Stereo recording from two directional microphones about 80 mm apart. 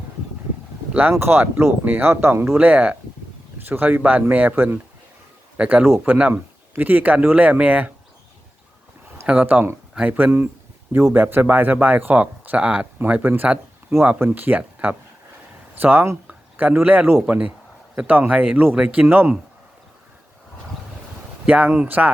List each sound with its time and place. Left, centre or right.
1.2 s speech: right
9.2 s speech: centre
10.9 s speech: right
19.0 s speech: right
21.4 s speech: centre